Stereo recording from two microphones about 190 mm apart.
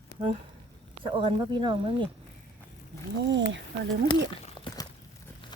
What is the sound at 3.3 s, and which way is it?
Speech, 70° right (ahead or behind).